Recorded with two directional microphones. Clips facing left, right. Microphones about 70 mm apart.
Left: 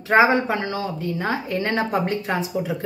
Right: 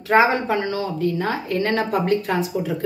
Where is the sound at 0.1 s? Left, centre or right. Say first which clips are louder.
Even; left.